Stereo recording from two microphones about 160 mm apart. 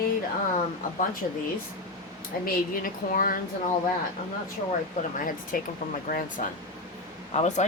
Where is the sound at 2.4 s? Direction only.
60° left (ahead or behind).